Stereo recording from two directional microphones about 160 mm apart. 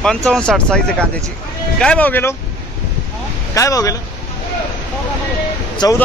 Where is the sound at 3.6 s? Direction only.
20° left (ahead or behind).